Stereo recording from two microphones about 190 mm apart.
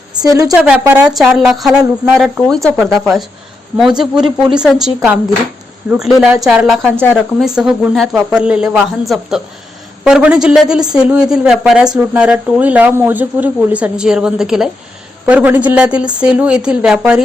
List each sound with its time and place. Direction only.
0.2 s a woman's voice: 20° right (ahead or behind)
0.5 s speech: 5° right (ahead or behind)
7.0 s speech: 10° left (ahead or behind)
7.4 s speech: 5° right (ahead or behind)